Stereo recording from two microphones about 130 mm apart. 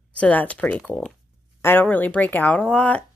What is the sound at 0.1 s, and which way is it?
Speech, 10° left (ahead or behind).